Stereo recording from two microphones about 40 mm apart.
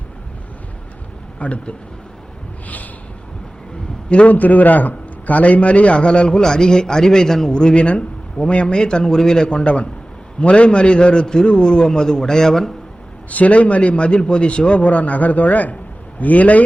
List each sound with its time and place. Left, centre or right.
1.4 s a man's voice: left
4.3 s a man's voice: left; by 9.5 s centre
9.5 s a man's voice: left; by 12.7 s centre
13.3 s a man's voice: left